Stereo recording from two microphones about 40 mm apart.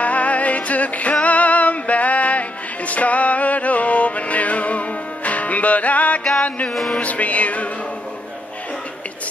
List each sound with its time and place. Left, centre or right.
0.0 s music: left